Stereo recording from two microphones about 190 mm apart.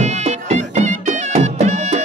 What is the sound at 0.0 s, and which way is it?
Music, 35° right (ahead or behind).